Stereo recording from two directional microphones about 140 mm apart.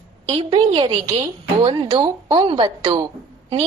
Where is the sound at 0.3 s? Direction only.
40° right (ahead or behind).